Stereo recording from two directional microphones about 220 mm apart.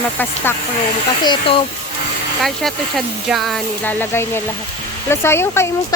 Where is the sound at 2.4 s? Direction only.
Centre (ahead or behind).